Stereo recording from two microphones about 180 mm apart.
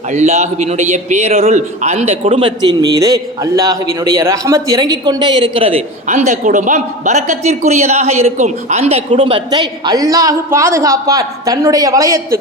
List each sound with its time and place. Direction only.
0.1 s a man's voice: 40° right (ahead or behind)
2.9 s a man's voice: 20° right (ahead or behind)